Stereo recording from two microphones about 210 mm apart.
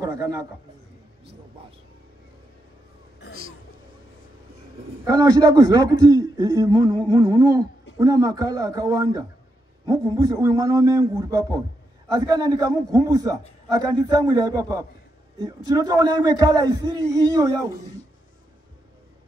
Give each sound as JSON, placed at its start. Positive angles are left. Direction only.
{"t": 0.0, "sound": "a man's voice", "side_deg": -15}
{"t": 5.0, "sound": "a man's voice", "side_deg": -15}